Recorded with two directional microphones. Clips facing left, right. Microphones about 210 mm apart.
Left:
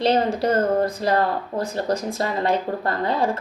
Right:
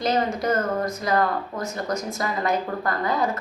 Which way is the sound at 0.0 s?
30° left (ahead or behind).